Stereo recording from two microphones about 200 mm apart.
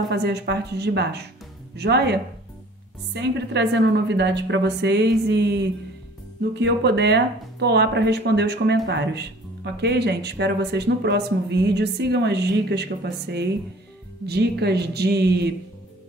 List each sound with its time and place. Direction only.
0.1 s speech: 55° right (ahead or behind)